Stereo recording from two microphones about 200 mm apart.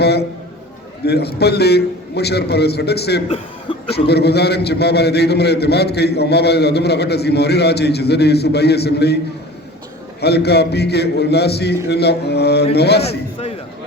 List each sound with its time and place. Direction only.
0.0 s a man's voice: 55° left (ahead or behind)
3.2 s speech: 30° left (ahead or behind)
3.9 s a man's voice: 55° left (ahead or behind)
10.2 s a man's voice: 55° left (ahead or behind)